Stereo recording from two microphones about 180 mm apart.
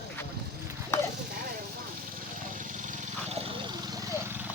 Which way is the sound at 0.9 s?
15° left (ahead or behind).